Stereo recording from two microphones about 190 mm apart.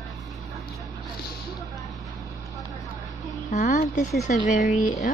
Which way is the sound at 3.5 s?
40° left (ahead or behind).